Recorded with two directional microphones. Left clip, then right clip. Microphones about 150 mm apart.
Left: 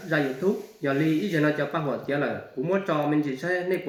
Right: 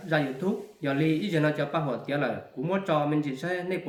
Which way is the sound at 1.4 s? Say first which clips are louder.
Left 2 dB; 45° right (ahead or behind).